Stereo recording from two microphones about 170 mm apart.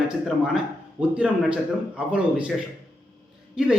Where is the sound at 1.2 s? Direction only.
5° right (ahead or behind).